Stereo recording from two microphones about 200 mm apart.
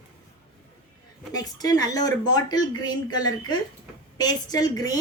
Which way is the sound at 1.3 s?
20° left (ahead or behind).